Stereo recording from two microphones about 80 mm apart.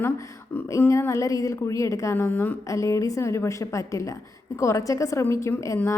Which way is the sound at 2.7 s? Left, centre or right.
Left.